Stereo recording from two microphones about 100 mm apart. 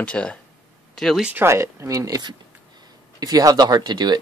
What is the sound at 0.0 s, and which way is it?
Speech, 10° left (ahead or behind).